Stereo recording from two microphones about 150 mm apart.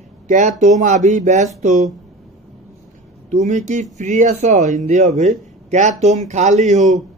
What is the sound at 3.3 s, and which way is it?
A man's voice, 50° right (ahead or behind).